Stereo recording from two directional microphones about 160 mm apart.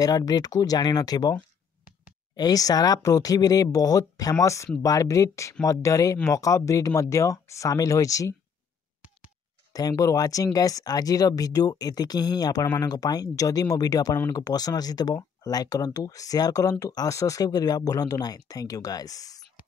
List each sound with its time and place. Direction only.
0.0 s speech: 25° left (ahead or behind)
2.3 s speech: 25° left (ahead or behind)
9.7 s speech: 25° left (ahead or behind)